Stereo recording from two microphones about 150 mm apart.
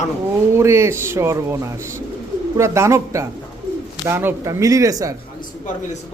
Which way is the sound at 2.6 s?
20° right (ahead or behind).